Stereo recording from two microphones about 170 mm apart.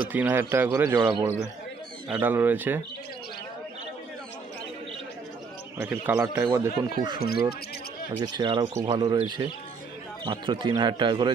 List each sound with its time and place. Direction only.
0.1 s speech: 10° right (ahead or behind)
2.0 s speech: 10° right (ahead or behind)
5.8 s speech: 15° right (ahead or behind)
6.8 s speech: 25° right (ahead or behind)
10.2 s speech: 30° right (ahead or behind)